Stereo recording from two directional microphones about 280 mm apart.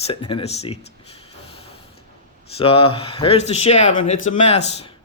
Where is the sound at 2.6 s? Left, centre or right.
Centre.